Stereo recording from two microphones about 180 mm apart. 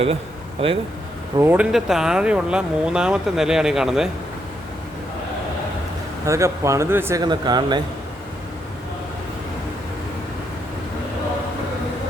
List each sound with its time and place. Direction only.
0.6 s speech: 30° right (ahead or behind)
1.4 s speech: 10° right (ahead or behind)
6.2 s speech: 15° right (ahead or behind)